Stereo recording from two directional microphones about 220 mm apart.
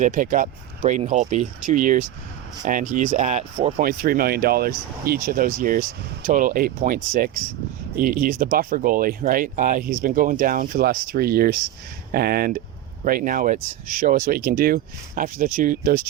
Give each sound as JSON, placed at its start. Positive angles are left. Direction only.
{"t": 0.0, "sound": "speech", "side_deg": -35}